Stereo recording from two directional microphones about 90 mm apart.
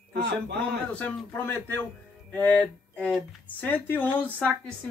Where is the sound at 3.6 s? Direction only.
20° left (ahead or behind).